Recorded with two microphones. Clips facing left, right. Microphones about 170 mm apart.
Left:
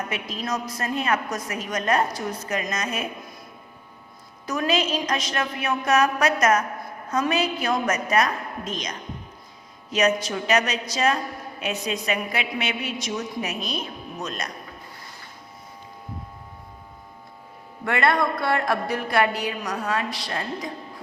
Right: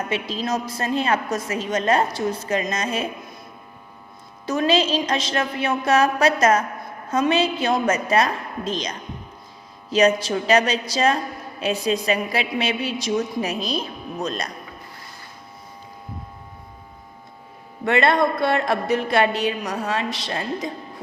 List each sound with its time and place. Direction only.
0.1 s a woman's voice: 30° right (ahead or behind)
4.4 s a woman's voice: 30° right (ahead or behind)
17.8 s a woman's voice: 25° right (ahead or behind)